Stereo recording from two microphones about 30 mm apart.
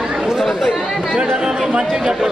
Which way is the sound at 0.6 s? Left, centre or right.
Right.